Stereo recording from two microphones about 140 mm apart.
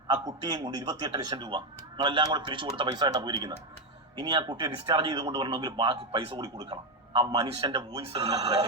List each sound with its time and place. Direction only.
0.1 s a man's voice: 35° right (ahead or behind)